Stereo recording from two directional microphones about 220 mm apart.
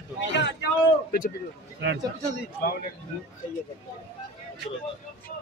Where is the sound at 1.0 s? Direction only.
35° left (ahead or behind).